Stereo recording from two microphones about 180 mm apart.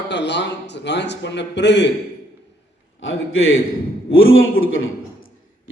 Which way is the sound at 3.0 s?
90° left.